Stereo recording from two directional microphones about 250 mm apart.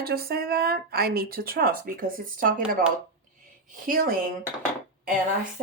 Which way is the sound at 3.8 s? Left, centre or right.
Right.